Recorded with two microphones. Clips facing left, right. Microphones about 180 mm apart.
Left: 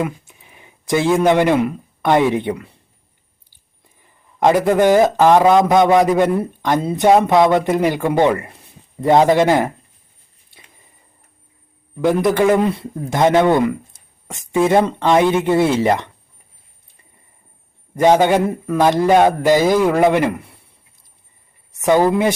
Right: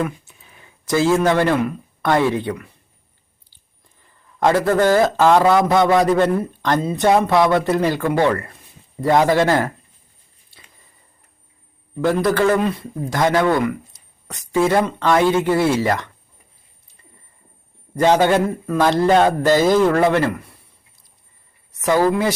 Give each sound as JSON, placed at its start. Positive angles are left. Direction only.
{"t": 0.0, "sound": "speech", "side_deg": 15}
{"t": 4.0, "sound": "a man's voice", "side_deg": 15}
{"t": 12.0, "sound": "a man's voice", "side_deg": 15}
{"t": 18.0, "sound": "a man's voice", "side_deg": 15}
{"t": 21.8, "sound": "a man's voice", "side_deg": 20}